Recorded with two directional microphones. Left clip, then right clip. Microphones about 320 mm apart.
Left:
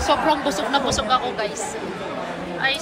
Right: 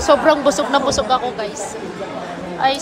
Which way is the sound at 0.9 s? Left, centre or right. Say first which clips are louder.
Right 3 dB; centre.